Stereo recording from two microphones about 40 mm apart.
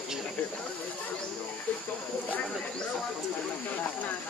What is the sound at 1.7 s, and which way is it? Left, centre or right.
Speech, left.